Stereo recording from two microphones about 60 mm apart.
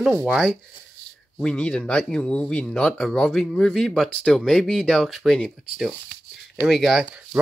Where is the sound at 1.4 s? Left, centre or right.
Centre.